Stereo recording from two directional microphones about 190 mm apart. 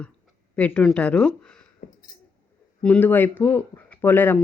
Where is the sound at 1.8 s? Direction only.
50° left (ahead or behind).